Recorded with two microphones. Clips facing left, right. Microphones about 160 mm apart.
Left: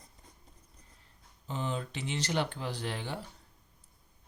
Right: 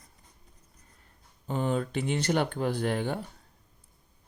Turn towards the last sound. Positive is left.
turn(degrees=-50)  # may be behind; listen again after turning